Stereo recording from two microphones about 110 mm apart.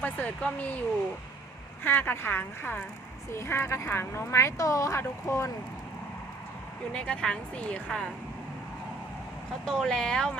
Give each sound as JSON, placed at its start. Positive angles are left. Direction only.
{"t": 0.0, "sound": "speech", "side_deg": 15}
{"t": 1.8, "sound": "speech", "side_deg": 20}
{"t": 6.9, "sound": "speech", "side_deg": 10}
{"t": 9.6, "sound": "speech", "side_deg": 5}